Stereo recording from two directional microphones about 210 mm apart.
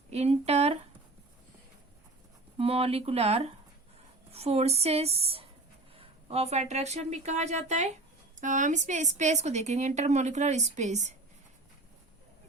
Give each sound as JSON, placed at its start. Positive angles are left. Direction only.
{"t": 0.1, "sound": "speech", "side_deg": -30}
{"t": 2.6, "sound": "a woman's voice", "side_deg": -30}